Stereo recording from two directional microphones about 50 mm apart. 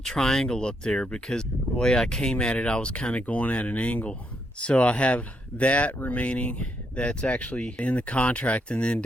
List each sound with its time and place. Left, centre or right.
0.0 s speech: centre